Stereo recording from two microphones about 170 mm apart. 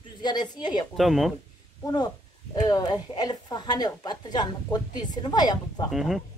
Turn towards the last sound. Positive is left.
turn(degrees=0)  # may be behind; listen again after turning